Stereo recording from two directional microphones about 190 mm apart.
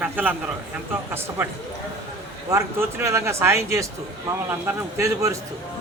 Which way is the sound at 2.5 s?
15° right (ahead or behind).